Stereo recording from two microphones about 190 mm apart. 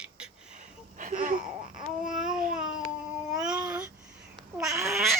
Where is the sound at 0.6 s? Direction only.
45° right (ahead or behind).